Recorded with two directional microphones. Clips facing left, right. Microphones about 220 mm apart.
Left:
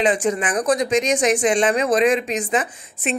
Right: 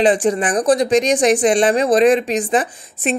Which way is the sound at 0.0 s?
35° right (ahead or behind).